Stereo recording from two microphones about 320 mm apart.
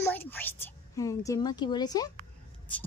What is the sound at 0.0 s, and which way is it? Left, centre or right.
A woman's voice, centre.